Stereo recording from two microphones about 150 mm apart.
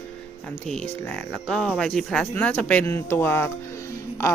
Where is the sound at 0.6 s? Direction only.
5° left (ahead or behind).